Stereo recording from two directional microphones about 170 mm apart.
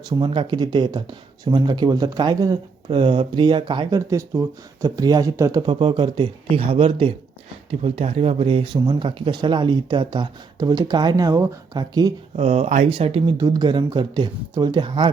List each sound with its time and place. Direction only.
0.0 s speech: 30° right (ahead or behind)
12.4 s speech: 35° right (ahead or behind)